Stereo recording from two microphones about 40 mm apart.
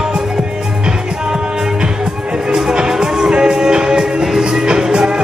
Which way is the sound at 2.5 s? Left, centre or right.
Centre.